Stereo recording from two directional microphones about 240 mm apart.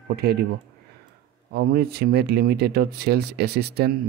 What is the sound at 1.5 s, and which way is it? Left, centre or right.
Speech, right.